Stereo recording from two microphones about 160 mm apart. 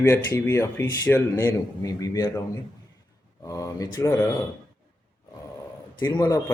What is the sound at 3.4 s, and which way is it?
Speech, 20° left (ahead or behind).